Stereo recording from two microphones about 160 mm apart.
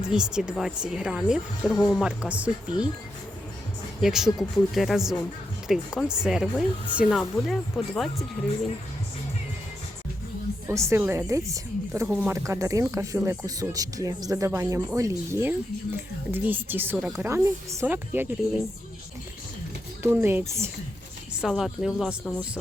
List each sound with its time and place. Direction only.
0.0 s speech: 5° right (ahead or behind)
4.0 s speech: 5° right (ahead or behind)
10.7 s a woman's voice: 15° right (ahead or behind)
20.0 s speech: 15° right (ahead or behind)
21.4 s speech: centre (ahead or behind)